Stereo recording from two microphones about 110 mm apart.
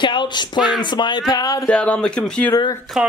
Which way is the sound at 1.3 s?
35° left (ahead or behind).